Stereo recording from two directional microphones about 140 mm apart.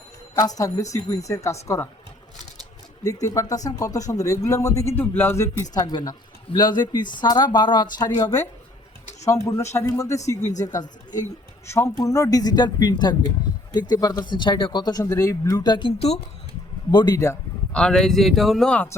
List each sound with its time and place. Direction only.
0.3 s speech: 25° left (ahead or behind)
3.2 s speech: 25° left (ahead or behind)
5.7 s speech: 30° left (ahead or behind); by 16.2 s 45° left (ahead or behind)
16.9 s speech: 30° left (ahead or behind)
17.7 s a man's voice: 5° left (ahead or behind)